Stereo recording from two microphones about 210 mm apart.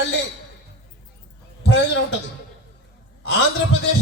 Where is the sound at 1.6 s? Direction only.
60° left (ahead or behind).